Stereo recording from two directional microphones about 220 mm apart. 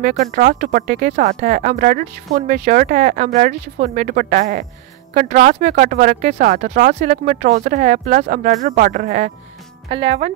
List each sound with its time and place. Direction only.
0.0 s speech: 35° right (ahead or behind)